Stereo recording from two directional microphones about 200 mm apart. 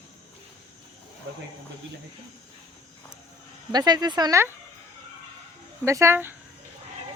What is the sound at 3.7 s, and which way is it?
Speech, 20° right (ahead or behind).